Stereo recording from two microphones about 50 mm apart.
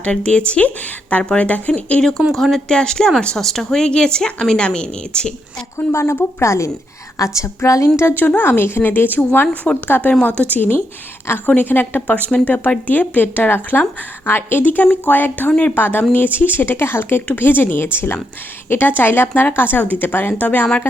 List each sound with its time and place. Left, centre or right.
0.0 s speech: centre
2.0 s speech: centre
2.6 s speech: centre
5.7 s a woman's voice: left
7.2 s a woman's voice: left
8.1 s a woman's voice: left
15.7 s a woman's voice: left
16.7 s speech: left
19.3 s a woman's voice: left